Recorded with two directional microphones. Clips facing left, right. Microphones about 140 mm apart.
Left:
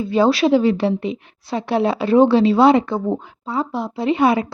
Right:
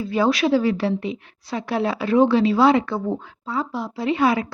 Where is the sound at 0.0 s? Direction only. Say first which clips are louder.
Left 4 dB; 25° left (ahead or behind).